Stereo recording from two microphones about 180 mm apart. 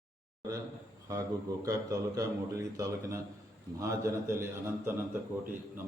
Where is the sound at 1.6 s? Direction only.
20° right (ahead or behind).